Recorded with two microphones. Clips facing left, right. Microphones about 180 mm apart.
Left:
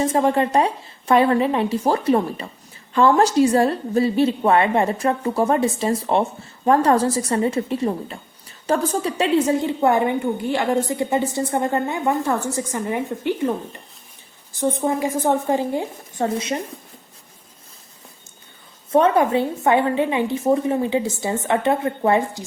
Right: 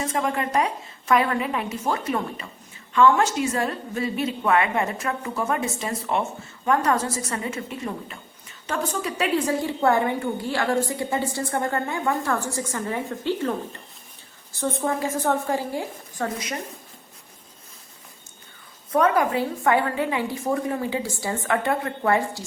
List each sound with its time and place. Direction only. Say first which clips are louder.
0.0 s a woman's voice: left 7 dB; 30° left (ahead or behind)
18.9 s a woman's voice: left 4 dB; 25° left (ahead or behind)